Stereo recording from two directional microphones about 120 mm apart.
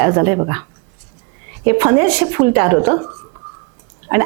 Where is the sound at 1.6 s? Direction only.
20° right (ahead or behind).